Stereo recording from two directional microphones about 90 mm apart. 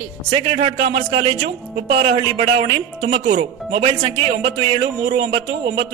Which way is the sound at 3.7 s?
75° right (ahead or behind).